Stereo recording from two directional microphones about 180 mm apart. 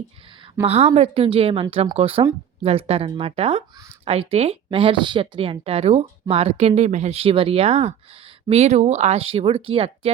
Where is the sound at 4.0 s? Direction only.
30° right (ahead or behind).